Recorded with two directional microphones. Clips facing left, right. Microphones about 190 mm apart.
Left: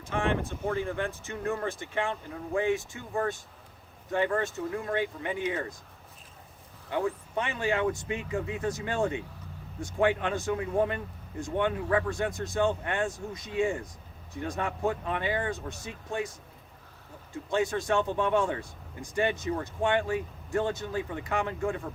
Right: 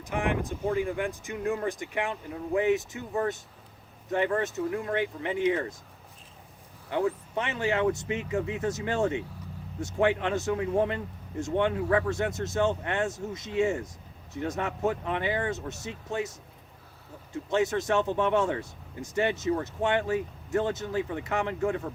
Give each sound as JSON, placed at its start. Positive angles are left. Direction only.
{"t": 0.0, "sound": "speech", "side_deg": -15}
{"t": 4.1, "sound": "speech", "side_deg": -20}
{"t": 6.9, "sound": "speech", "side_deg": -20}
{"t": 17.3, "sound": "speech", "side_deg": -20}